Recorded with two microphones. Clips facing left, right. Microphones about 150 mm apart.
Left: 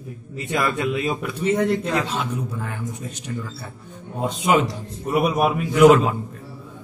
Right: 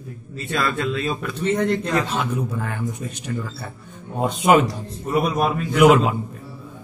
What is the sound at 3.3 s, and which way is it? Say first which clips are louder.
Speech: right 2 dB; 60° right (ahead or behind).